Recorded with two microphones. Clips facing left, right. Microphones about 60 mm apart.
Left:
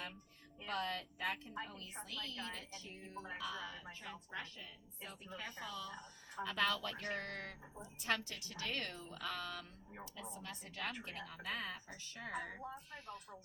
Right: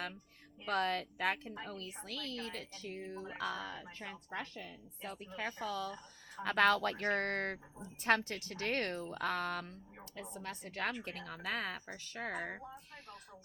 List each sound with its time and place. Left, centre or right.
0.6 s a woman's voice: right